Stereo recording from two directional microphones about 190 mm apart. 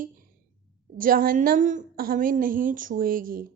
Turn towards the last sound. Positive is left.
turn(degrees=-45)  # may be behind; listen again after turning